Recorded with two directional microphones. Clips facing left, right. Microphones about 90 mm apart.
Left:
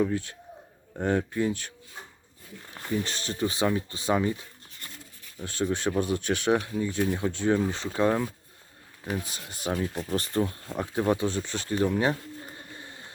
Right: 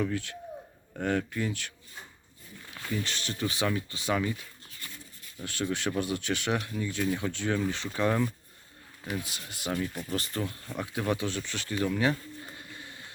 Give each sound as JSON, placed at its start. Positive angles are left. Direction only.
{"t": 0.0, "sound": "speech", "side_deg": 20}
{"t": 3.0, "sound": "speech", "side_deg": 30}
{"t": 9.1, "sound": "speech", "side_deg": 35}
{"t": 12.7, "sound": "a sound", "side_deg": 30}